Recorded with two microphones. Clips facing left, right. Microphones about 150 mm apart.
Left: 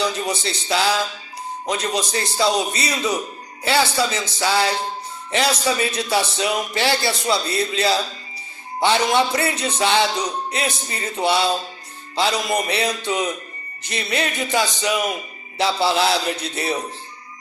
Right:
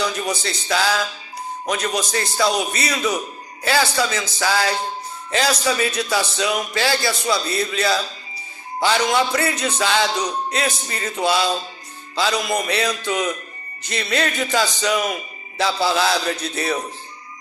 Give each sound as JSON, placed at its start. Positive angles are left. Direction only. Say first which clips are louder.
{"t": 0.0, "sound": "speech", "louder": "even", "side_deg": 25}